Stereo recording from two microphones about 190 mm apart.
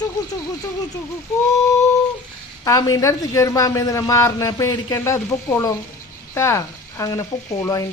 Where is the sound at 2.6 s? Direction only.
20° left (ahead or behind).